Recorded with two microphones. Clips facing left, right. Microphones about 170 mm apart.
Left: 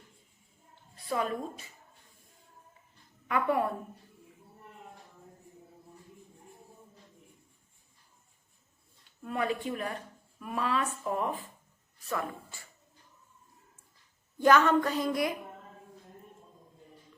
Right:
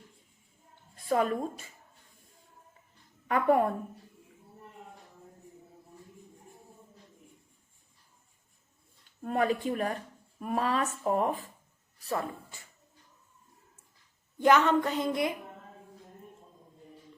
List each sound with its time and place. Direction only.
0.9 s a woman's voice: 45° right (ahead or behind)
3.2 s speech: 40° right (ahead or behind)
9.2 s speech: 40° right (ahead or behind)
14.3 s speech: 20° right (ahead or behind)